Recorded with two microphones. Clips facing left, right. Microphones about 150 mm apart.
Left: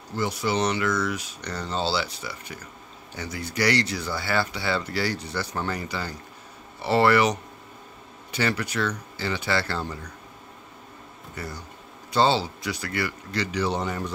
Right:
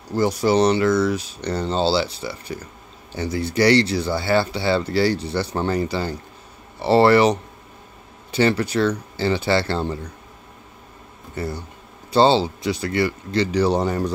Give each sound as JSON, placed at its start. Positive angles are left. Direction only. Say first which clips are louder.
{"t": 0.1, "sound": "speech", "louder": "right 8 dB", "side_deg": -40}
{"t": 11.3, "sound": "speech", "louder": "right 8 dB", "side_deg": -30}